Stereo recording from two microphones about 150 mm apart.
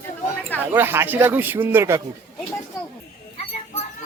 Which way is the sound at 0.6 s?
15° right (ahead or behind).